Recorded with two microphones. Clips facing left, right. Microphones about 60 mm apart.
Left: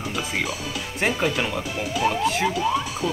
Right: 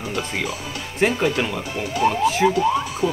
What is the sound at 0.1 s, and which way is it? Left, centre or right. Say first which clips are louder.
Speech: right 2 dB; centre.